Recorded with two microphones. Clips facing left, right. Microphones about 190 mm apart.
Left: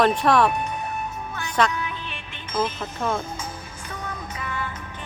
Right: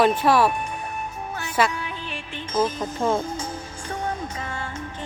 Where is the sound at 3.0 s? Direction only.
30° right (ahead or behind).